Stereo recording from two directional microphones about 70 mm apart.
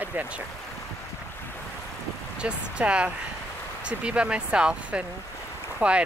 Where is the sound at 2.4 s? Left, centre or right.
Centre.